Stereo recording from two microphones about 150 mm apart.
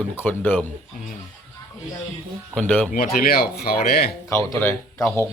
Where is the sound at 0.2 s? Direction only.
10° left (ahead or behind).